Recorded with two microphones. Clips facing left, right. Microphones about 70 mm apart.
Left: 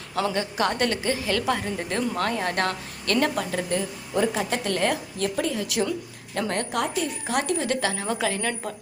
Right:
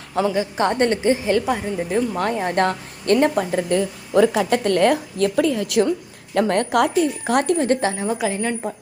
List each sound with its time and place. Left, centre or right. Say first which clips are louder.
0.5 s speech: right 6 dB; right
1.5 s a woman's voice: right 4 dB; centre
2.1 s speech: right 5 dB; right
3.7 s a woman's voice: right 7 dB; right
6.7 s a woman's voice: right 9 dB; right
6.9 s speech: right 8 dB; right
7.9 s a woman's voice: right 4 dB; centre